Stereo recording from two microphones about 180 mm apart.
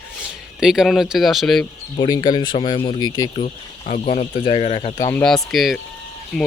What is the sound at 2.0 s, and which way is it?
Speech, 20° left (ahead or behind).